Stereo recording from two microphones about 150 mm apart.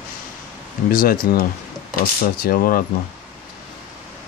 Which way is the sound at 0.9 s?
75° left (ahead or behind).